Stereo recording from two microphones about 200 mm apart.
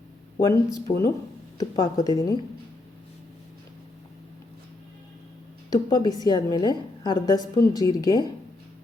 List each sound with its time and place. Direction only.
0.3 s a woman's voice: 15° left (ahead or behind)
5.7 s a woman's voice: 20° left (ahead or behind)